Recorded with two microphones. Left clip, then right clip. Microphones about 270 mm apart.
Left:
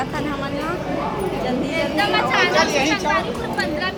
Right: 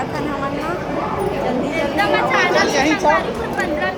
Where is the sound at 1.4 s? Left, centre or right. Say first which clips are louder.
Right 2 dB; centre.